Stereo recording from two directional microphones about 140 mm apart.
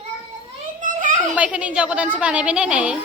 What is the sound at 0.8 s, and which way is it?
Children playing, 65° right (ahead or behind).